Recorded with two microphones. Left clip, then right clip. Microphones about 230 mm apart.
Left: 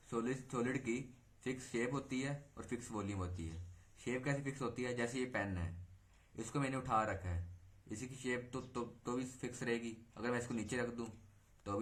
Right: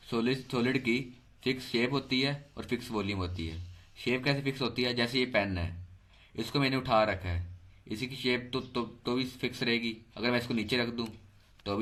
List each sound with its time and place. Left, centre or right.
0.1 s speech: right